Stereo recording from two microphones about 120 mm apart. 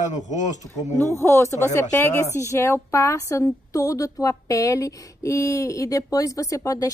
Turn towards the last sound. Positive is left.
turn(degrees=25)  # may be behind; listen again after turning